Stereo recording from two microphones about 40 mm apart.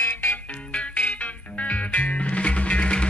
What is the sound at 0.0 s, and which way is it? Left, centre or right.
Music, left.